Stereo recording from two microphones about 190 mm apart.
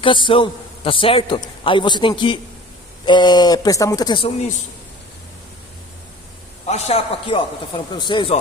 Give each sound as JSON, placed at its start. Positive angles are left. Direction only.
{"t": 0.0, "sound": "a man's voice", "side_deg": 25}
{"t": 6.7, "sound": "a man's voice", "side_deg": 35}